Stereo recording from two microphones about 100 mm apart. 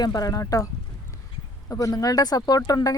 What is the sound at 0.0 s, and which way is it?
Speech, 40° left (ahead or behind).